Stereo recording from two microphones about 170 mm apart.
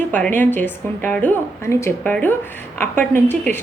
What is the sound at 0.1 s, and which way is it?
A woman's voice, 10° left (ahead or behind).